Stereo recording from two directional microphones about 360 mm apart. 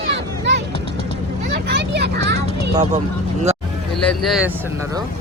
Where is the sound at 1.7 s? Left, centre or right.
Right.